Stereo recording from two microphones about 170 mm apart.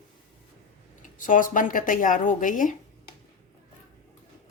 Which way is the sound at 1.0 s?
50° left (ahead or behind).